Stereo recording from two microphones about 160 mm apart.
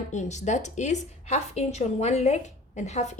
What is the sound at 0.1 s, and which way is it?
Speech, 50° left (ahead or behind).